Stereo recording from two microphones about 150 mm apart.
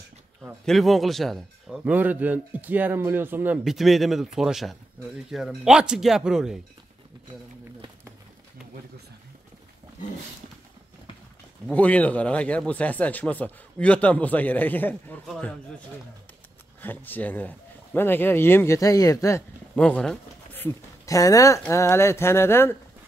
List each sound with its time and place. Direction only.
0.7 s speech: centre (ahead or behind)
1.9 s speech: 10° right (ahead or behind)
3.6 s speech: centre (ahead or behind)
11.7 s speech: 10° left (ahead or behind)
16.8 s speech: 10° left (ahead or behind)
19.7 s speech: 5° left (ahead or behind)